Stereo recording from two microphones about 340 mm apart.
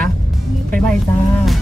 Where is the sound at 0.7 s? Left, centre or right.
Centre.